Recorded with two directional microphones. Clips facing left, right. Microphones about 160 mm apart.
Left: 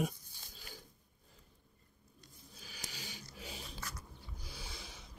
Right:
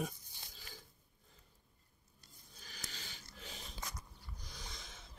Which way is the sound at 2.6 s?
10° left (ahead or behind).